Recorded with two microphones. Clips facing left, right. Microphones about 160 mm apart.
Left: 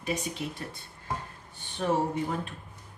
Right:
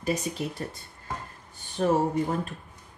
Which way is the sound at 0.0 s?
40° right (ahead or behind).